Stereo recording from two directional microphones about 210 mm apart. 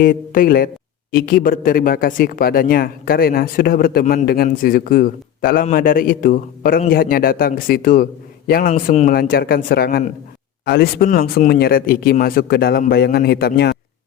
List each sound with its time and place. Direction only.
0.0 s speech: 45° left (ahead or behind)